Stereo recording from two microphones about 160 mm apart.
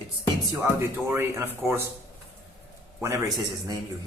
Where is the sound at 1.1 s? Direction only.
15° right (ahead or behind).